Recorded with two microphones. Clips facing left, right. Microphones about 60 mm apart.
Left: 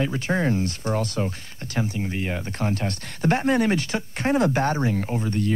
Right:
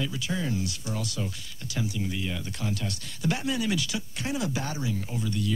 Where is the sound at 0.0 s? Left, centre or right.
Left.